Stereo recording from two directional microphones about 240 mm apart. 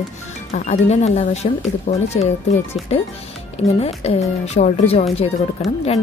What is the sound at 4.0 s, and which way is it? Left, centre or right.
Speech, left.